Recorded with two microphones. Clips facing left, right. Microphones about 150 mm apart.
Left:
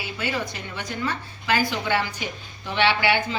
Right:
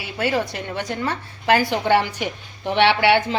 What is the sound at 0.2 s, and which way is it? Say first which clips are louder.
A woman's voice: right 8 dB; 75° right (ahead or behind).